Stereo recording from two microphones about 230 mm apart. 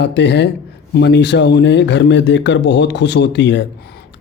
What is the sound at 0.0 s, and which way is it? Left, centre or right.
A man's voice, left.